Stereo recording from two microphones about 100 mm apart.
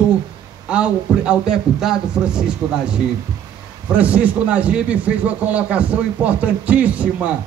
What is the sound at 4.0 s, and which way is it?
A man's voice, 15° right (ahead or behind).